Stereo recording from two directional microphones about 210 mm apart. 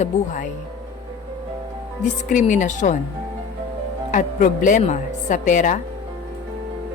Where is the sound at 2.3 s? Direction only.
35° left (ahead or behind).